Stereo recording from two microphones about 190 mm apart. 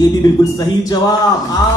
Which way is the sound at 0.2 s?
20° left (ahead or behind).